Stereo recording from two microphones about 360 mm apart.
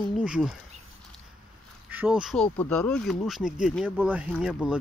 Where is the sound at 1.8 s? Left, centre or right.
Centre.